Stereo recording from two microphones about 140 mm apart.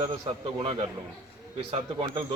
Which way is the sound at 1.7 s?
40° right (ahead or behind).